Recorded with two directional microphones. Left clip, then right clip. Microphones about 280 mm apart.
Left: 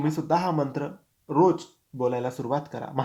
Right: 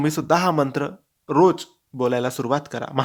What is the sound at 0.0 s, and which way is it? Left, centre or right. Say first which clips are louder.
Speech: right 5 dB; right.